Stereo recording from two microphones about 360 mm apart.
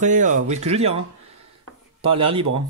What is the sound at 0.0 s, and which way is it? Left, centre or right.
Speech, centre.